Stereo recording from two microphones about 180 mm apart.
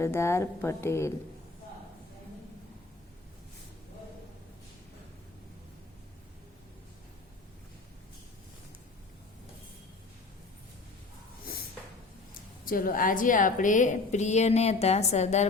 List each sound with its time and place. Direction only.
0.0 s a woman's voice: 15° left (ahead or behind)
12.3 s a woman's voice: 50° left (ahead or behind)